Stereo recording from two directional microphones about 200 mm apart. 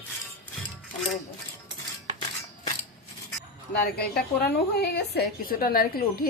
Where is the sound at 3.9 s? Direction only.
50° left (ahead or behind).